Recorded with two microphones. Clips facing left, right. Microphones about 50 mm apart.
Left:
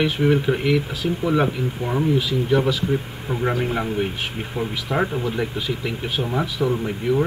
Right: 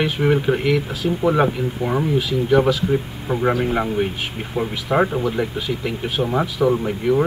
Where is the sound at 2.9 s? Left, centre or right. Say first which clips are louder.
Right 3 dB; centre.